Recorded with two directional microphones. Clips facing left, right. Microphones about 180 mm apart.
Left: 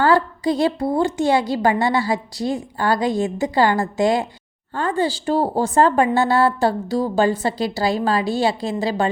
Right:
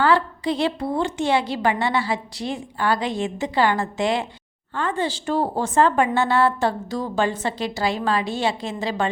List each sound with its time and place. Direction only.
0.0 s a woman's voice: 40° left (ahead or behind)